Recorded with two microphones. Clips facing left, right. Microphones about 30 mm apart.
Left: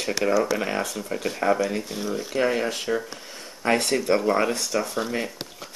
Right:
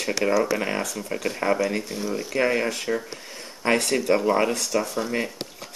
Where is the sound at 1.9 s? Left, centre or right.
Centre.